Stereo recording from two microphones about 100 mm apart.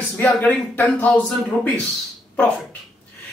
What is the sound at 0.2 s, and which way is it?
Speech, 15° left (ahead or behind).